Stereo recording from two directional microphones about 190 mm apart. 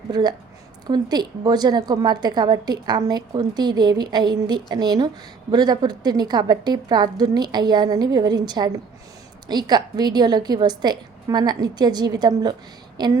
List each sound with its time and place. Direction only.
0.1 s a woman's voice: 20° right (ahead or behind)